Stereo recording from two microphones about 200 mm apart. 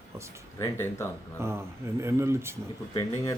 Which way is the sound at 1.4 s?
15° right (ahead or behind).